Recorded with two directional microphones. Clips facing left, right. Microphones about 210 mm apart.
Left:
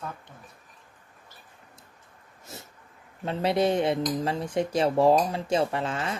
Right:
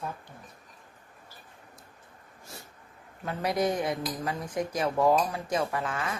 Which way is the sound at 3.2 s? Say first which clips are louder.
Left 4 dB; 25° left (ahead or behind).